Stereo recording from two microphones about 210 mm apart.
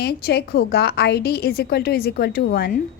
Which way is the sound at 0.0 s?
50° left (ahead or behind).